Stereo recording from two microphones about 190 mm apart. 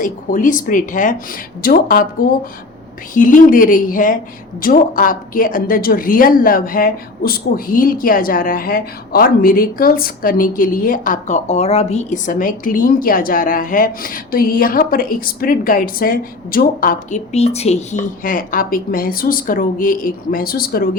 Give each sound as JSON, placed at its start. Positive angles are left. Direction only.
{"t": 0.0, "sound": "a woman's voice", "side_deg": 45}
{"t": 3.2, "sound": "a woman's voice", "side_deg": 45}